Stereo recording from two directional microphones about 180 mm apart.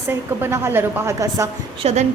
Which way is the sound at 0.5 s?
15° right (ahead or behind).